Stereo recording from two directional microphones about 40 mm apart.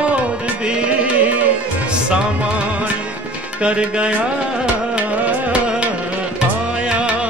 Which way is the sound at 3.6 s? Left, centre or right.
Right.